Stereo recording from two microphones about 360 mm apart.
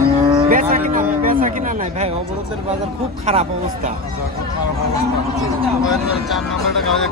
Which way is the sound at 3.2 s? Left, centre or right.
Centre.